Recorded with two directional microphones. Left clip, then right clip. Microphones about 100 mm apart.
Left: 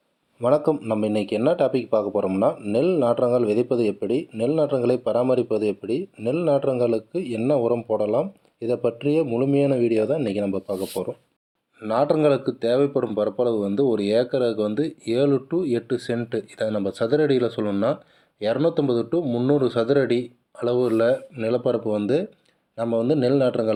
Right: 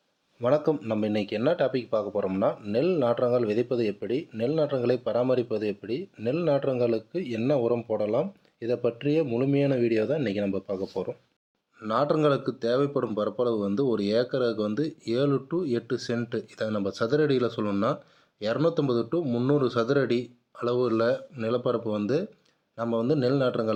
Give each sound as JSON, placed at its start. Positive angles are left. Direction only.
{"t": 0.4, "sound": "speech", "side_deg": 15}